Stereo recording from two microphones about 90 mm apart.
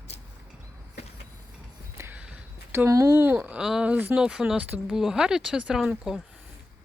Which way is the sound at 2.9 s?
35° right (ahead or behind).